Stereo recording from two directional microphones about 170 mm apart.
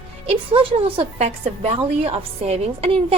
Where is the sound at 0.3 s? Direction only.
30° right (ahead or behind).